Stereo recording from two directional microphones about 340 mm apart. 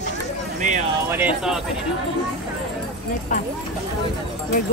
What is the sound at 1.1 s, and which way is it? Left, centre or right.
Speech, centre.